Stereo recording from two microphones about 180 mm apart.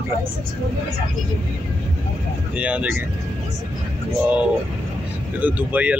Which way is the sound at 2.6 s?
5° right (ahead or behind).